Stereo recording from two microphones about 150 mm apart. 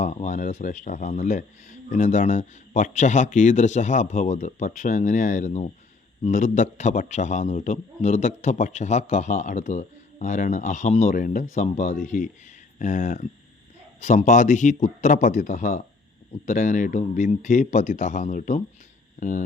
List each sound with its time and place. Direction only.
0.0 s a man's voice: 50° left (ahead or behind)